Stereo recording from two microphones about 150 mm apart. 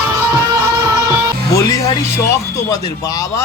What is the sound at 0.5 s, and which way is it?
Music, 20° right (ahead or behind).